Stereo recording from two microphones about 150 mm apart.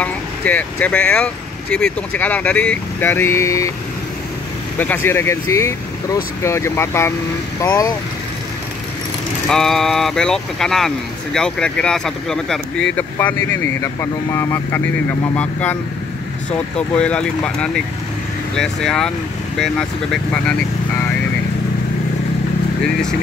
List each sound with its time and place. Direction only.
0.0 s speech: 10° left (ahead or behind)
4.7 s speech: 15° left (ahead or behind)
9.5 s speech: 5° left (ahead or behind)